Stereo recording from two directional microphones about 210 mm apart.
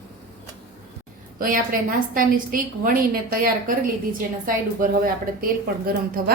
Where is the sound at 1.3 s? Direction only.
40° right (ahead or behind).